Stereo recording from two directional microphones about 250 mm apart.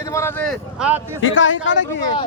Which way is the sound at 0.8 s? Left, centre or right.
Centre.